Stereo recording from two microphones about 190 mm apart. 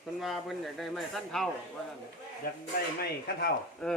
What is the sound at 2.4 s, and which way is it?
Speech, 50° left (ahead or behind).